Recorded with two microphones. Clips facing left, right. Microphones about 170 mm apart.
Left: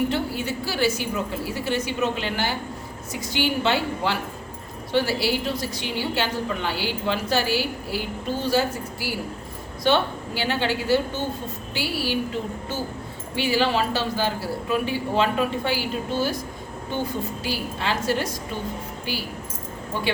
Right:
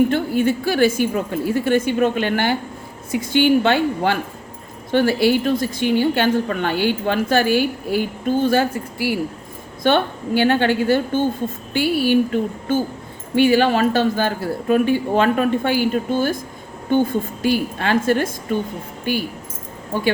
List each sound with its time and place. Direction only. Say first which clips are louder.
0.1 s a woman's voice: right 8 dB; 55° right (ahead or behind)